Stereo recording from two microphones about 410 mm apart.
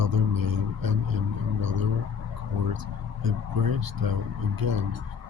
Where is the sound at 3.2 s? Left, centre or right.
Right.